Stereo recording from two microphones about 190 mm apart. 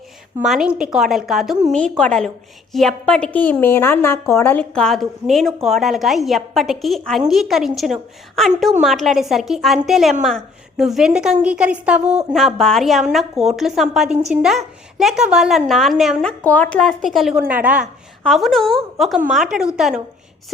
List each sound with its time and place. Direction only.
0.4 s a woman's voice: centre (ahead or behind)